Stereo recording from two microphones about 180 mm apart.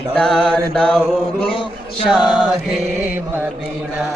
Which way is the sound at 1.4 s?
30° left (ahead or behind).